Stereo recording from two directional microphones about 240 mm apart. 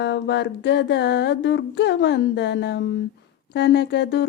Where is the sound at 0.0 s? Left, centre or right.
Left.